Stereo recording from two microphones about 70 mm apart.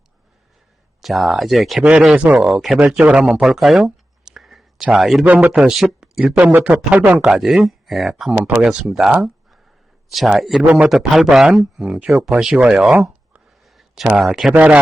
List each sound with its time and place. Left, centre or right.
1.0 s speech: centre
2.8 s speech: centre
5.2 s speech: right
5.7 s speech: centre
8.4 s speech: centre
8.8 s speech: centre
11.9 s speech: centre
13.7 s a sound: centre
14.5 s speech: centre